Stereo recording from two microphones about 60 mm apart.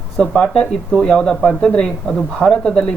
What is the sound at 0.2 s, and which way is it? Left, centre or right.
Speech, centre.